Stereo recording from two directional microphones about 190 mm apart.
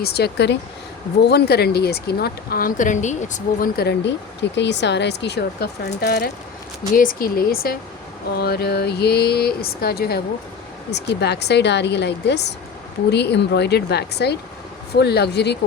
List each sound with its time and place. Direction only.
0.0 s speech: 60° left (ahead or behind)